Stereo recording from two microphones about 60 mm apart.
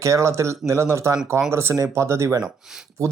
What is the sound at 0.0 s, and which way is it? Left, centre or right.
Speech, right.